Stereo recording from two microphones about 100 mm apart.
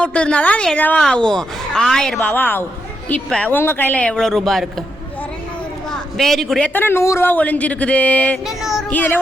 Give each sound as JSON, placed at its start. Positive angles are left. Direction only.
{"t": 0.0, "sound": "speech", "side_deg": 10}
{"t": 2.2, "sound": "a man's voice", "side_deg": 20}
{"t": 3.2, "sound": "speech", "side_deg": 5}
{"t": 3.5, "sound": "speech", "side_deg": 20}
{"t": 5.9, "sound": "a sound", "side_deg": 5}
{"t": 6.7, "sound": "speech", "side_deg": 20}
{"t": 8.4, "sound": "child singing", "side_deg": -5}
{"t": 8.9, "sound": "speech", "side_deg": 15}